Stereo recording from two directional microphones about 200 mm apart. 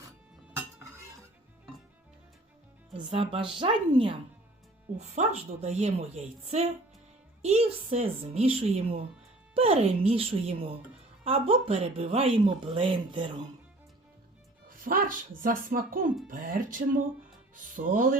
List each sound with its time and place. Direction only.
3.0 s a woman's voice: 30° right (ahead or behind)
14.7 s music: 45° right (ahead or behind)
15.4 s speech: 45° right (ahead or behind)